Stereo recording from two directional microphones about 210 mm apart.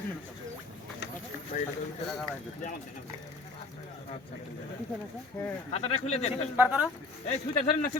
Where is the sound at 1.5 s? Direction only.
35° left (ahead or behind).